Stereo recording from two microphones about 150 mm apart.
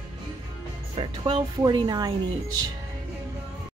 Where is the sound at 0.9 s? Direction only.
35° right (ahead or behind).